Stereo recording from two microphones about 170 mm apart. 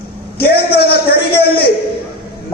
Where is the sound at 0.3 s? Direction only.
65° left (ahead or behind).